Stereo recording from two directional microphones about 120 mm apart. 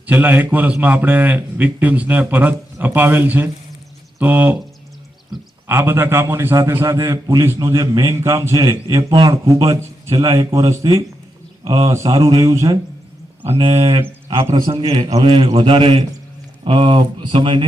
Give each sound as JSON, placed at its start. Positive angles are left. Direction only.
{"t": 0.0, "sound": "a man's voice", "side_deg": -15}
{"t": 5.6, "sound": "a man's voice", "side_deg": -20}
{"t": 11.9, "sound": "a man's voice", "side_deg": -30}
{"t": 13.4, "sound": "a man's voice", "side_deg": -45}